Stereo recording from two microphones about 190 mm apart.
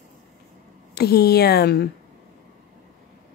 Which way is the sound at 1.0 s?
55° left (ahead or behind).